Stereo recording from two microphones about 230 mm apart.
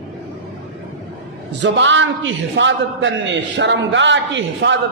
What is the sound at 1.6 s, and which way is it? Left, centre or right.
A man's voice, right.